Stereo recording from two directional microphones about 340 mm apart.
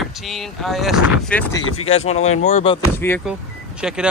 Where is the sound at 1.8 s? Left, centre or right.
Centre.